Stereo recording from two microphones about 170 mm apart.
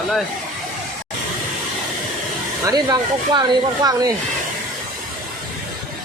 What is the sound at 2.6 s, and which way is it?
Speech, 20° right (ahead or behind).